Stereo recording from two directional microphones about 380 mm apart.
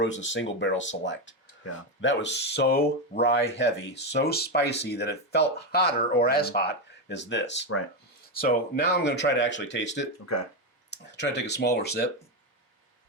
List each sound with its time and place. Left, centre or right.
0.0 s speech: left